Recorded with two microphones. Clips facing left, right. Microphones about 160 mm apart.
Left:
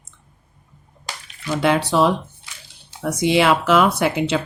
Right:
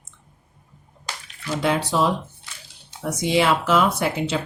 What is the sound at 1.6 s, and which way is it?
Speech, 70° left (ahead or behind).